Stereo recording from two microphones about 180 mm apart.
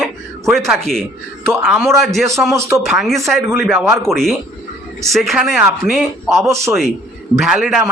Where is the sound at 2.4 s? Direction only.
15° right (ahead or behind).